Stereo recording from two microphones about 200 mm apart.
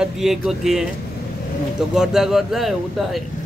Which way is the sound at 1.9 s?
Centre (ahead or behind).